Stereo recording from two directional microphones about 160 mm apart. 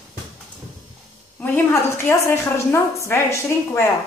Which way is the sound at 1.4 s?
10° left (ahead or behind).